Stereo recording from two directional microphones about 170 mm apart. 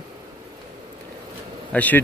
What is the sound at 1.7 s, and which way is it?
Speech, 10° left (ahead or behind).